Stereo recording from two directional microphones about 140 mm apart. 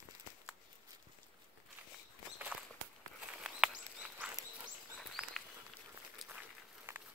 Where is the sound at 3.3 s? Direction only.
5° right (ahead or behind).